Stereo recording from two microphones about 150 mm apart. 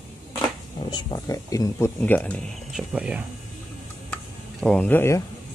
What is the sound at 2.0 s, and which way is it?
Speech, 10° left (ahead or behind).